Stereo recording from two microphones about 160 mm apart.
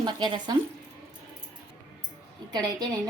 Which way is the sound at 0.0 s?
25° right (ahead or behind).